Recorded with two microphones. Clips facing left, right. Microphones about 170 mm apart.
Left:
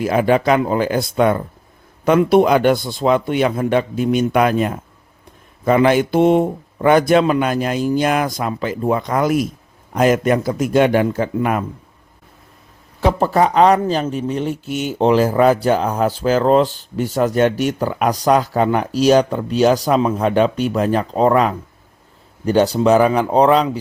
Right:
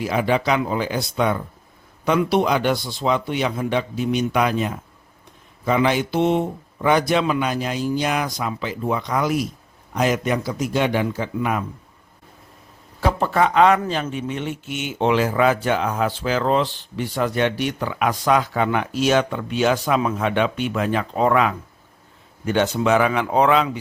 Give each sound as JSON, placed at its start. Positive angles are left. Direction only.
{"t": 0.0, "sound": "a man's voice", "side_deg": 50}
{"t": 13.1, "sound": "speech", "side_deg": 40}